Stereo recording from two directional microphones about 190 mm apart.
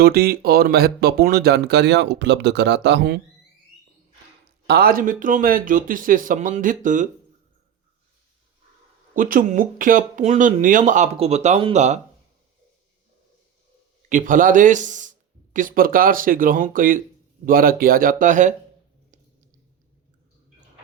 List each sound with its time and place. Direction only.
0.0 s speech: 55° right (ahead or behind)
4.6 s speech: 55° right (ahead or behind)
9.1 s speech: 45° right (ahead or behind)
14.1 s speech: 45° right (ahead or behind)